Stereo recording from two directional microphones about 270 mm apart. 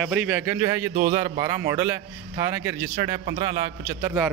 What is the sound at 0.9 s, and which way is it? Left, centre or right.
Speech, right.